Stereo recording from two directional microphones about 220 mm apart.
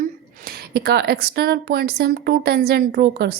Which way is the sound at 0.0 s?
45° right (ahead or behind).